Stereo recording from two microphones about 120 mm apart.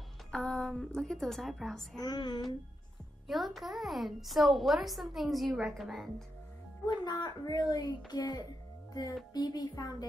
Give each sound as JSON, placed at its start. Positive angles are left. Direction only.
{"t": 0.3, "sound": "a woman's voice", "side_deg": 5}
{"t": 2.0, "sound": "speech", "side_deg": 35}
{"t": 3.3, "sound": "a woman's voice", "side_deg": 0}
{"t": 6.9, "sound": "speech", "side_deg": 35}